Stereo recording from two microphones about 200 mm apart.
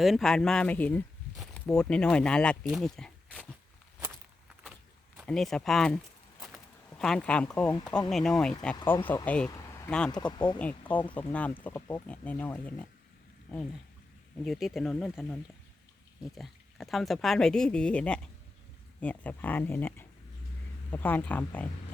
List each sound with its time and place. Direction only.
0.0 s speech: centre (ahead or behind)
5.2 s speech: centre (ahead or behind)
8.7 s speech: 15° left (ahead or behind)
10.3 s speech: 20° left (ahead or behind)
10.6 s speech: 5° left (ahead or behind)
14.4 s speech: centre (ahead or behind)